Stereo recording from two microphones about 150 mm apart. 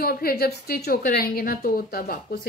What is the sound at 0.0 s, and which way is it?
A woman's voice, 85° left.